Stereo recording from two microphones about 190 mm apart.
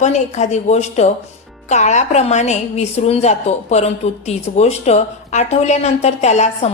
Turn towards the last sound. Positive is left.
turn(degrees=35)  # may be behind; listen again after turning